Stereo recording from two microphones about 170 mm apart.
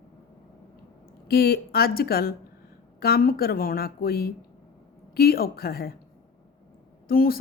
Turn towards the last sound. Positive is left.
turn(degrees=60)  # may be behind; listen again after turning